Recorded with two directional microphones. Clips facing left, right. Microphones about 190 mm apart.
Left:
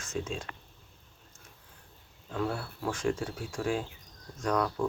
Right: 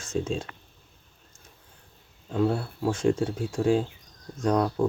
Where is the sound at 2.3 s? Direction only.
25° right (ahead or behind).